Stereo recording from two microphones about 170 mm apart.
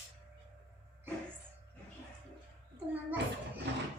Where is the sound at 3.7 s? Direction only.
85° right.